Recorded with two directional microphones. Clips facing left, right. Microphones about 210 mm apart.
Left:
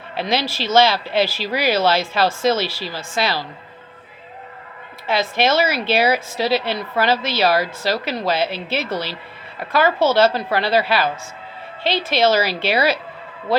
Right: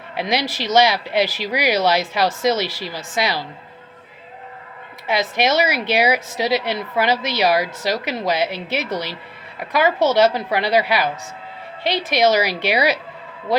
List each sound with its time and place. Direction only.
0.2 s speech: 15° right (ahead or behind)
5.0 s speech: 20° right (ahead or behind)